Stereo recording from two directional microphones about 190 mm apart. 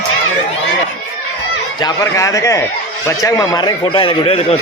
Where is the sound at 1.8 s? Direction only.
20° left (ahead or behind).